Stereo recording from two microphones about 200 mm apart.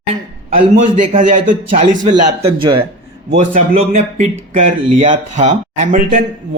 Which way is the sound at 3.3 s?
35° right (ahead or behind).